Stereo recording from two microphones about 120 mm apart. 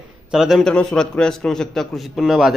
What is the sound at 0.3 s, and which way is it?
A man's voice, 5° right (ahead or behind).